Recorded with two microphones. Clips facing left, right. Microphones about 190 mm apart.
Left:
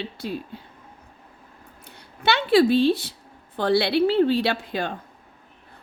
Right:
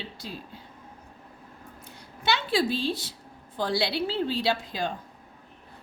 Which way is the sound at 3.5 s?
60° left (ahead or behind).